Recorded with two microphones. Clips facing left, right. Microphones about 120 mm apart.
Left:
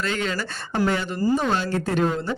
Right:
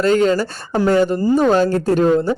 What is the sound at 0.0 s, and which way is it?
A woman's voice, 40° right (ahead or behind).